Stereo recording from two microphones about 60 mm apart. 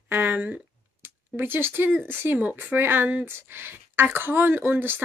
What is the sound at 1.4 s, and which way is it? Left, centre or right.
A woman's voice, right.